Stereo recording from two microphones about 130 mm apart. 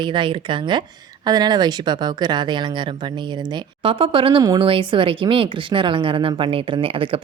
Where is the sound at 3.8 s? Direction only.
40° right (ahead or behind).